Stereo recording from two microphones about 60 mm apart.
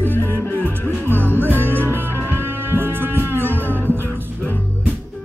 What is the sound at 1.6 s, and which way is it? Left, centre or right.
Music, right.